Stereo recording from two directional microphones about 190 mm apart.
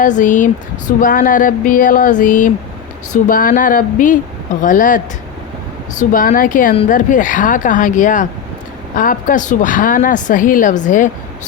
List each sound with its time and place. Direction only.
0.0 s speech: 40° left (ahead or behind)
6.0 s speech: 45° left (ahead or behind)